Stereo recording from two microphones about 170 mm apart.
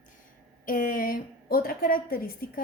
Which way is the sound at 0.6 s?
55° left (ahead or behind).